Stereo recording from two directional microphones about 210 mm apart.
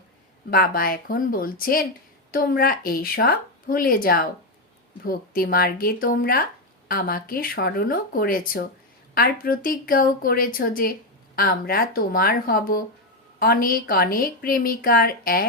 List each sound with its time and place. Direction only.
0.5 s a woman's voice: 45° left (ahead or behind)